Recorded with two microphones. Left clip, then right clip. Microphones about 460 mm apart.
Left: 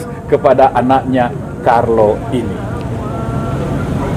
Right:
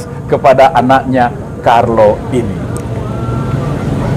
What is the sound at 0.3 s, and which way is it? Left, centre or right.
A man's voice, right.